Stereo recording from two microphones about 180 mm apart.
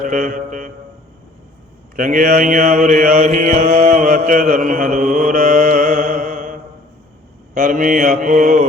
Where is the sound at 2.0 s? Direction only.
50° right (ahead or behind).